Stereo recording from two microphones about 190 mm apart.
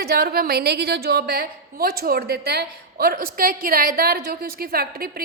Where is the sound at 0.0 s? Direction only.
55° right (ahead or behind).